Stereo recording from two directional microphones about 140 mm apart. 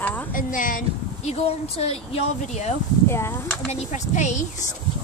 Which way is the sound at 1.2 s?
45° left (ahead or behind).